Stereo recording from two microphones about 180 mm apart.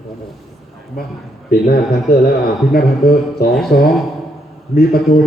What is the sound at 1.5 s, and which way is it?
A man's voice, 60° left (ahead or behind).